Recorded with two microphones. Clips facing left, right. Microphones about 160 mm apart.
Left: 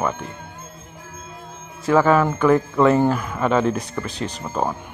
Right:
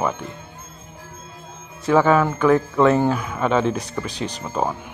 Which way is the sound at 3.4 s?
15° right (ahead or behind).